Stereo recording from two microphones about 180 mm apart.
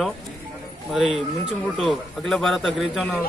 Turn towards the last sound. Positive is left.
turn(degrees=0)  # may be behind; listen again after turning